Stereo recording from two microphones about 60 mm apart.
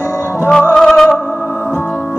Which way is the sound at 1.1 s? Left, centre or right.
Left.